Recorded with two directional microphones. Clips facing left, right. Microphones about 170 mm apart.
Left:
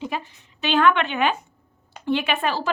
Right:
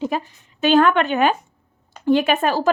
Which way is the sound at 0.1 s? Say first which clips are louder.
Right 5 dB; 45° right (ahead or behind).